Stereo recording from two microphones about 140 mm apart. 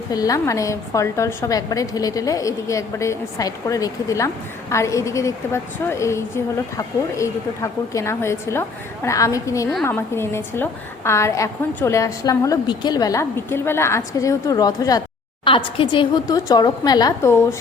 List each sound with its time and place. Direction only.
0.1 s a woman's voice: 25° left (ahead or behind)
15.4 s a woman's voice: 35° left (ahead or behind)